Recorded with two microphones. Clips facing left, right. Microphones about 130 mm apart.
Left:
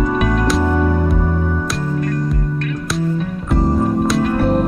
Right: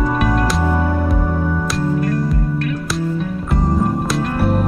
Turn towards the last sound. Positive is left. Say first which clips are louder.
# left 3 dB
turn(degrees=0)  # may be behind; listen again after turning